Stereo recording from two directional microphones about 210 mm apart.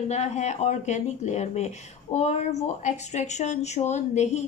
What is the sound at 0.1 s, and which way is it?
Speech, 35° left (ahead or behind).